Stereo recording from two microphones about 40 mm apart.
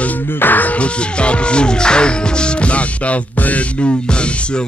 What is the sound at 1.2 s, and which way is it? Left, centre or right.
Speech, left.